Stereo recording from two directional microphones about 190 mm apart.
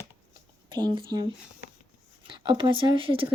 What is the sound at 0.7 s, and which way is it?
Speech, 20° right (ahead or behind).